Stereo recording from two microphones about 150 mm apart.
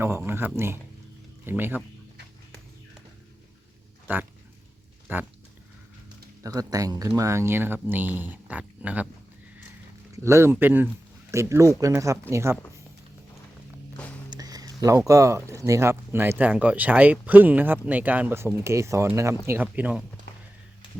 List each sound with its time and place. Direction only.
0.3 s speech: 15° right (ahead or behind)
4.0 s speech: 15° right (ahead or behind)
5.1 s pig: 15° right (ahead or behind)
6.4 s speech: 25° right (ahead or behind)
10.2 s speech: 15° right (ahead or behind)
14.3 s speech: 25° right (ahead or behind); by 20.1 s 10° right (ahead or behind)